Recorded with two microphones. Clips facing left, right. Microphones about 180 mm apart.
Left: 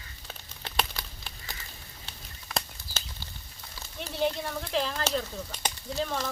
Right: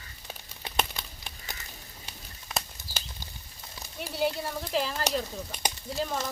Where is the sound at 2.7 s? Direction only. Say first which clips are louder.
Even; 15° right (ahead or behind).